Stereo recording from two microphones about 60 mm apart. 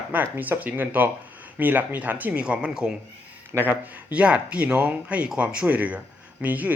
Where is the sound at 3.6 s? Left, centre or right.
Right.